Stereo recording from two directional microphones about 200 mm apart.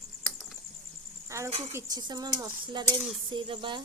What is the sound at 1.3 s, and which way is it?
Cricket, 15° right (ahead or behind).